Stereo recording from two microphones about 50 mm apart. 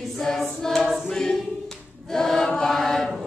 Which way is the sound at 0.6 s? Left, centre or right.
Centre.